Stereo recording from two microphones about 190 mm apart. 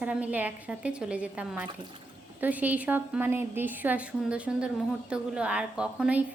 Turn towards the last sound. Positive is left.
turn(degrees=-5)  # may be behind; listen again after turning